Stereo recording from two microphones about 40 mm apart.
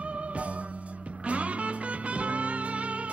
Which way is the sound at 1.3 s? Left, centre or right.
Right.